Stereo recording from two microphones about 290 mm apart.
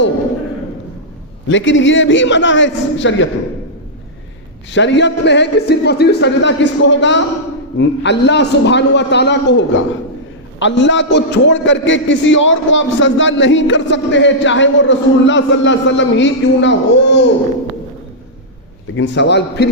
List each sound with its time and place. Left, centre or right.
1.5 s a man's voice: left
4.7 s a man's voice: left
18.9 s a man's voice: left